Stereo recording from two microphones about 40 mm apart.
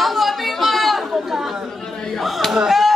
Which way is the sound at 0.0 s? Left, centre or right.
Centre.